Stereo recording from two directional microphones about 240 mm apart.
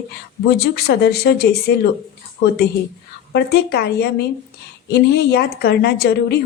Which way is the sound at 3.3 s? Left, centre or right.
Left.